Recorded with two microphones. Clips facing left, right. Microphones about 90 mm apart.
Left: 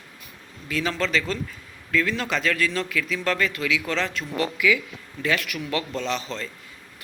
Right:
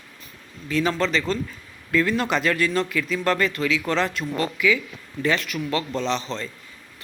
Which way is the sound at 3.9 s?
5° right (ahead or behind).